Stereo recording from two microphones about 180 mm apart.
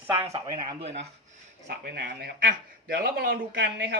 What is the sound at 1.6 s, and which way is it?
A man's voice, 55° right (ahead or behind).